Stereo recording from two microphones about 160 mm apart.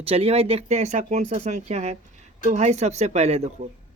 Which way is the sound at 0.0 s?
40° right (ahead or behind).